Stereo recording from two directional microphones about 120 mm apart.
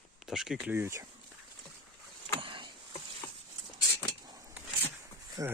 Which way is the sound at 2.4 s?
45° right (ahead or behind).